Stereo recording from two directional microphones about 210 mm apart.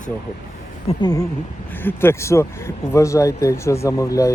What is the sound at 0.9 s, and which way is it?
Speech, 20° left (ahead or behind).